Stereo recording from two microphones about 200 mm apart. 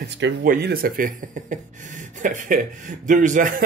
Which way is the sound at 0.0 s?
50° right (ahead or behind).